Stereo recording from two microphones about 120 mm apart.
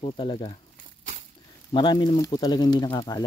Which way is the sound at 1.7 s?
40° left (ahead or behind).